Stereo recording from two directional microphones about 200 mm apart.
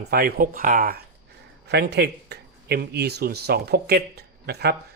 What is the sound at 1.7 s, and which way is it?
Speech, 55° right (ahead or behind).